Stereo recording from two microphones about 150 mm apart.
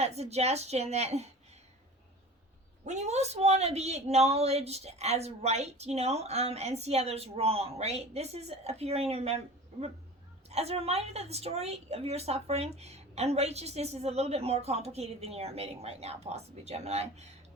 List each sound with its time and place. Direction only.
0.0 s speech: 45° right (ahead or behind)
2.8 s speech: 50° right (ahead or behind)
10.5 s speech: 45° right (ahead or behind)